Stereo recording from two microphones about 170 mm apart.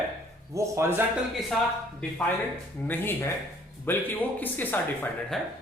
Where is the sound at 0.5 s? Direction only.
15° right (ahead or behind).